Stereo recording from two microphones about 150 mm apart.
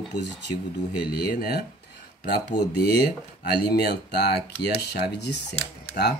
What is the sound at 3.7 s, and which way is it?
Speech, 90° left.